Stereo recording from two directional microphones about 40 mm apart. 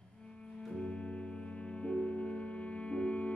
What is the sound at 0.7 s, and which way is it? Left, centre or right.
Music, left.